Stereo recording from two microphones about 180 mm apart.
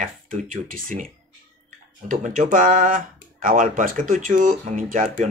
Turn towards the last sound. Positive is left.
turn(degrees=-50)  # may be behind; listen again after turning